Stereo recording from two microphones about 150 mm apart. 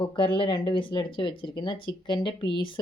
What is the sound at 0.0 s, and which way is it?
Speech, 35° left (ahead or behind).